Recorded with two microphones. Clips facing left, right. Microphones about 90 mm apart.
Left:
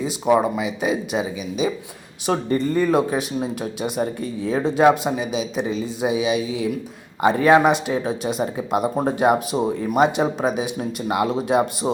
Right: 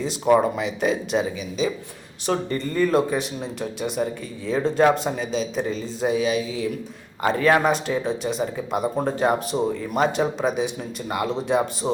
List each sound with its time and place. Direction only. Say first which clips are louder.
0.0 s speech: even; 5° left (ahead or behind)